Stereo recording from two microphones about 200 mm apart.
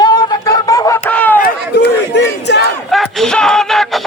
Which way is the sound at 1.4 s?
55° left (ahead or behind).